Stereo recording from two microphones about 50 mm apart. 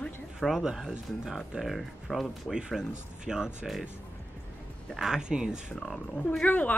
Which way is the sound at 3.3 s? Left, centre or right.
Centre.